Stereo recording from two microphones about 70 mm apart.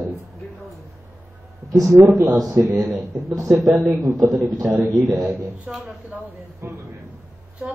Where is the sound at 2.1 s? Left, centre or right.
Right.